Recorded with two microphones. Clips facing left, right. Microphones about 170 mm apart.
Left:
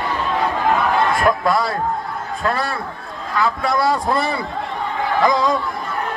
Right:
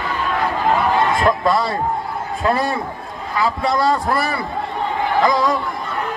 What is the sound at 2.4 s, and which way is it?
Speech, 10° right (ahead or behind).